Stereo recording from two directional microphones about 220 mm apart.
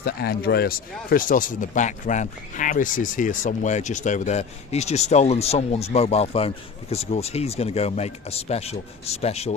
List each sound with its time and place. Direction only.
0.0 s speech: 45° left (ahead or behind); by 9.6 s 30° left (ahead or behind)